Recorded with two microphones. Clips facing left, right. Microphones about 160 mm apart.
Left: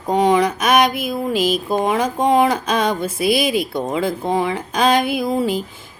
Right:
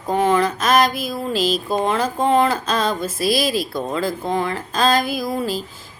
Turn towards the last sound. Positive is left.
turn(degrees=15)  # may be behind; listen again after turning